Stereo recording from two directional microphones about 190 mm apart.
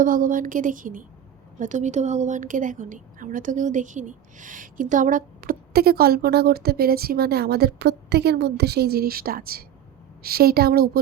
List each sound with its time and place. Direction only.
0.0 s a woman's voice: 45° right (ahead or behind)